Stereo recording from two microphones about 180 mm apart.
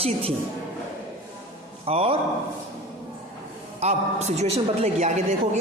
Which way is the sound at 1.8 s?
30° right (ahead or behind).